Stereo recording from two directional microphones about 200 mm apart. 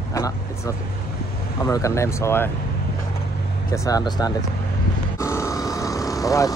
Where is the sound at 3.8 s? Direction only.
20° left (ahead or behind).